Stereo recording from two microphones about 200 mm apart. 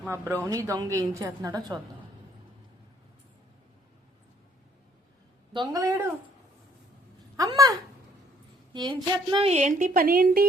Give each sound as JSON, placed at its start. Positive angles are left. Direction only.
{"t": 0.4, "sound": "a woman's voice", "side_deg": -15}
{"t": 5.5, "sound": "a woman's voice", "side_deg": -15}
{"t": 7.3, "sound": "a woman's voice", "side_deg": -20}